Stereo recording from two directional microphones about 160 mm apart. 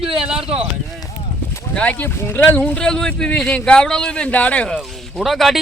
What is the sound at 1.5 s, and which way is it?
Speech, 10° left (ahead or behind).